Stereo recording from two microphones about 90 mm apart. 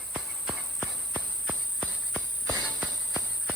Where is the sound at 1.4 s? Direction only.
10° left (ahead or behind).